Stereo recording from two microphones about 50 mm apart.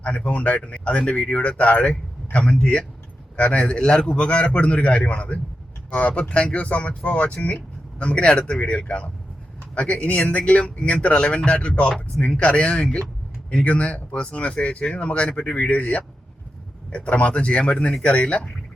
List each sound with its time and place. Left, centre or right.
0.3 s speech: left